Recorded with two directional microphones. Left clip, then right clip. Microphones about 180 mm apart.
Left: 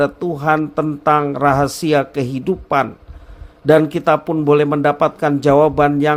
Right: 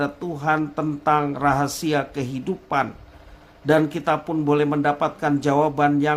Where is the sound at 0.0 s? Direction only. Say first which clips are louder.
Left 7 dB; 30° left (ahead or behind).